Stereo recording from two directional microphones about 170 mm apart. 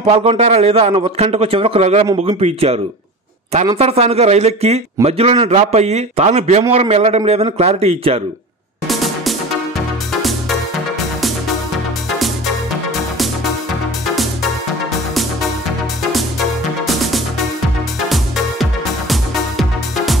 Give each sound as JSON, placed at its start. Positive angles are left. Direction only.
{"t": 0.0, "sound": "a man's voice", "side_deg": -35}
{"t": 8.8, "sound": "music", "side_deg": 0}
{"t": 16.0, "sound": "music", "side_deg": 0}